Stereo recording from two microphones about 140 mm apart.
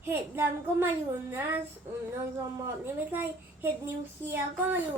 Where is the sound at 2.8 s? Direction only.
15° right (ahead or behind).